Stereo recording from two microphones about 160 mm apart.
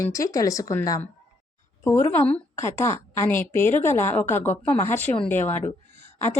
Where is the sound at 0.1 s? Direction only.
20° left (ahead or behind).